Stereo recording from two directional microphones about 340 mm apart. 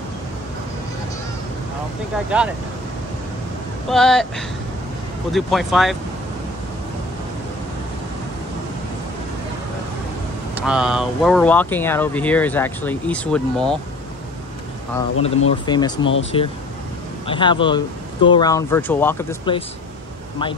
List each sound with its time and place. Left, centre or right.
2.3 s speech: centre
3.9 s speech: centre
10.5 s speech: centre
15.2 s speech: centre
16.0 s speech: left
17.3 s speech: centre